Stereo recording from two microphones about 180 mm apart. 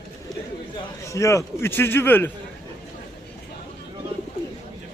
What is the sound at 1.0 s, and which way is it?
A man's voice, 15° left (ahead or behind).